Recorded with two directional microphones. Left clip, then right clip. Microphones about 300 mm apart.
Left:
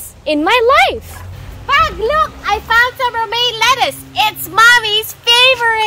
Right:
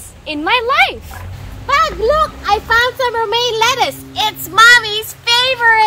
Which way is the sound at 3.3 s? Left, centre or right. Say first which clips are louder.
Left 3 dB; centre.